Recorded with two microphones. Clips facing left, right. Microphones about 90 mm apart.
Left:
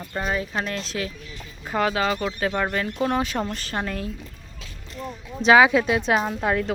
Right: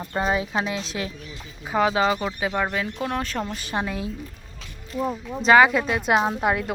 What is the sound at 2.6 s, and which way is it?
Speech, centre (ahead or behind).